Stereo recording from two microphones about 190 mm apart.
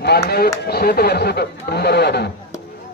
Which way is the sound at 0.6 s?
55° left (ahead or behind).